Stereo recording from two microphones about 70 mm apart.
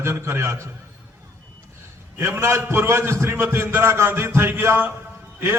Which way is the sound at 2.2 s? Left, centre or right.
Right.